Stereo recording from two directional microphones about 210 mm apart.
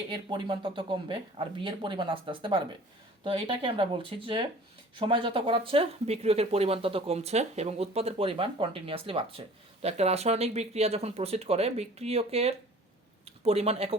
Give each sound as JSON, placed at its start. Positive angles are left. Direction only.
{"t": 0.1, "sound": "speech", "side_deg": -20}